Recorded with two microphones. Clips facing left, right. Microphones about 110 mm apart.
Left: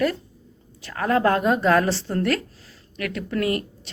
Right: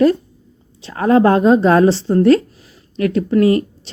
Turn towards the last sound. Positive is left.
turn(degrees=-25)  # may be behind; listen again after turning